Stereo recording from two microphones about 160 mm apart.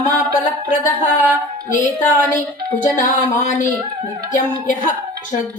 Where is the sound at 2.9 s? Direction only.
50° left (ahead or behind).